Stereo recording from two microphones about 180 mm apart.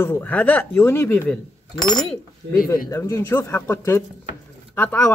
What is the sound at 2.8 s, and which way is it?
Speech, 20° left (ahead or behind).